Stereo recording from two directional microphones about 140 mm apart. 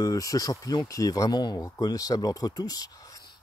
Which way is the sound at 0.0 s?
25° left (ahead or behind).